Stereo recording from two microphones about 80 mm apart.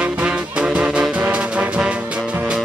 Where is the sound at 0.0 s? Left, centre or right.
Centre.